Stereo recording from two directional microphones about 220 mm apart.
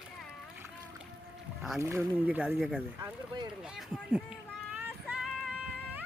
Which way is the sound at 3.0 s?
20° right (ahead or behind).